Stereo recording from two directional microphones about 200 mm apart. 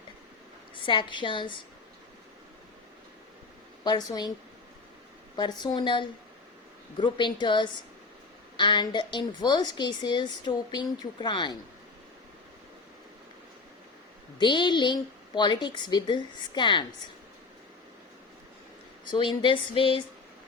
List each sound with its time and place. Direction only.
0.8 s a woman's voice: 25° left (ahead or behind)
3.8 s a woman's voice: 20° left (ahead or behind)
5.4 s a woman's voice: 20° left (ahead or behind)
14.3 s a woman's voice: 25° left (ahead or behind)
19.1 s a woman's voice: 25° left (ahead or behind)